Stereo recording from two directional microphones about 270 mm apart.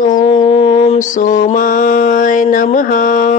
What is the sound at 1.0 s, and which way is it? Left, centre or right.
Mantra, left.